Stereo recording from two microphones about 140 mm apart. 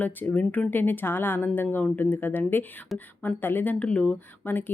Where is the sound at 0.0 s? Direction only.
10° left (ahead or behind).